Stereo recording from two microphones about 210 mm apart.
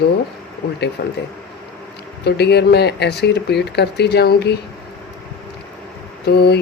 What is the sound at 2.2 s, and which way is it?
Speech, 50° left (ahead or behind).